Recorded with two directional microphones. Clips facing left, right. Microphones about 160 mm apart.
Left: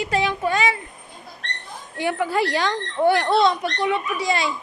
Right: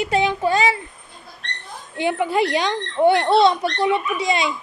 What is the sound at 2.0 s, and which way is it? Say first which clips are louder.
Speech: right 2 dB; 20° right (ahead or behind).